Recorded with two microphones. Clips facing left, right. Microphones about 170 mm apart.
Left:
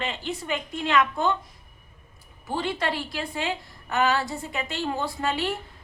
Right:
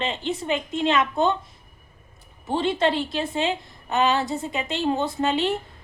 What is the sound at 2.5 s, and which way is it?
A woman's voice, 25° right (ahead or behind).